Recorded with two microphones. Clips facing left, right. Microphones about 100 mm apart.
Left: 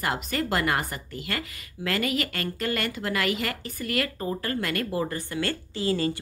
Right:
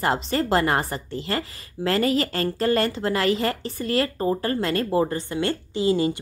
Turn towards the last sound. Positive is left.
turn(degrees=-20)  # may be behind; listen again after turning